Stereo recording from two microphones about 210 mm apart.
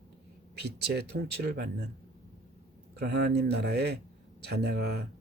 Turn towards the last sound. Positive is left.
turn(degrees=-50)  # may be behind; listen again after turning